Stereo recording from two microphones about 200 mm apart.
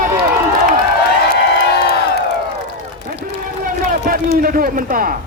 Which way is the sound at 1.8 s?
55° left (ahead or behind).